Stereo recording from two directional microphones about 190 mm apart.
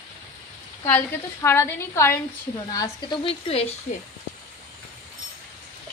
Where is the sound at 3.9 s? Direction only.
40° left (ahead or behind).